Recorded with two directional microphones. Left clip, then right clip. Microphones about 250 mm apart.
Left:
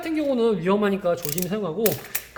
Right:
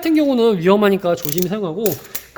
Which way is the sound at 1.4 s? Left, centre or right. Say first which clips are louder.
Right 5 dB; right.